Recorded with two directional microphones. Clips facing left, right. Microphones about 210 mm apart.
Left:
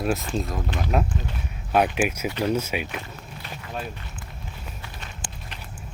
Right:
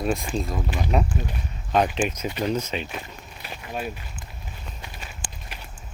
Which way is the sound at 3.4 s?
10° right (ahead or behind).